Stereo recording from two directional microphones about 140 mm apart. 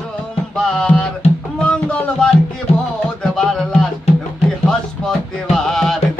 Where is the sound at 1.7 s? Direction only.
5° left (ahead or behind).